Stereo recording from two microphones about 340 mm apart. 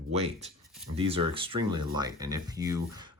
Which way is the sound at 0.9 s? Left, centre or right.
Centre.